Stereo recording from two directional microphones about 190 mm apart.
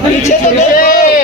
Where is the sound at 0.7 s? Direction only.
50° left (ahead or behind).